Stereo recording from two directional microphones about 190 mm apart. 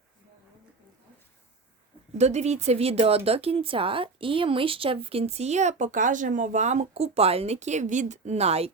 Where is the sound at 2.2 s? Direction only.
35° right (ahead or behind).